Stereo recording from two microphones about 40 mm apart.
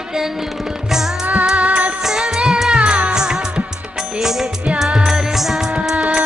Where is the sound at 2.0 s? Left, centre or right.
Centre; by 3.1 s right.